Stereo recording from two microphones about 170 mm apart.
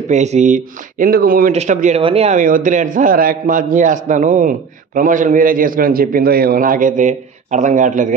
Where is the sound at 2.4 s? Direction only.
50° right (ahead or behind).